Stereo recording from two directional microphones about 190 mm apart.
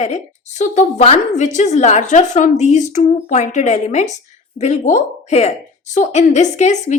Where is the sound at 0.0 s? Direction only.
35° left (ahead or behind).